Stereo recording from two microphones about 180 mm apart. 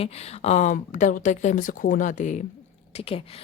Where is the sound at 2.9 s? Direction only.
30° left (ahead or behind).